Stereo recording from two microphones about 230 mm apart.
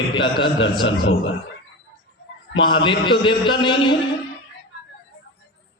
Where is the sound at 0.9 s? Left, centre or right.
Left.